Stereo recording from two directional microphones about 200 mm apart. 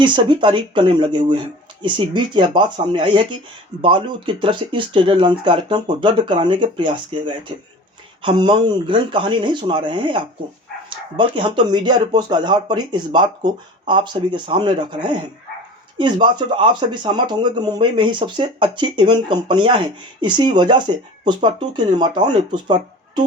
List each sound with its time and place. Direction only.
0.0 s speech: 25° right (ahead or behind)